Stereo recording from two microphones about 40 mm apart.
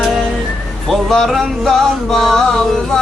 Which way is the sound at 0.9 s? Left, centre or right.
Centre.